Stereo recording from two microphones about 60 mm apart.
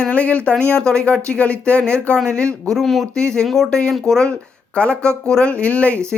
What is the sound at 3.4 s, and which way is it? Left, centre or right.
Speech, centre.